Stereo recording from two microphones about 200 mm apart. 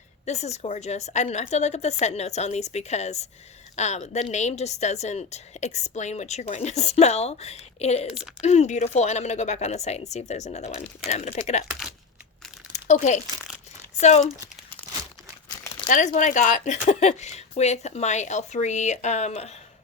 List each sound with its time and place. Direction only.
0.3 s a woman's voice: 35° left (ahead or behind)
12.7 s a woman's voice: 35° left (ahead or behind)
15.9 s a woman's voice: 40° left (ahead or behind)